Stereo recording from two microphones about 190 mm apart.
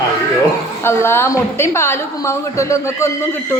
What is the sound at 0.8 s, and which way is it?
A woman's voice, 10° left (ahead or behind).